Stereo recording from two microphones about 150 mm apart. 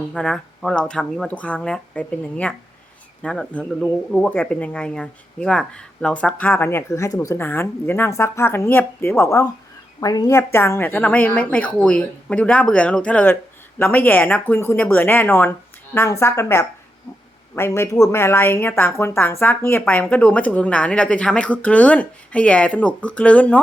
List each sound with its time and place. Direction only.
0.1 s a woman's voice: 5° left (ahead or behind)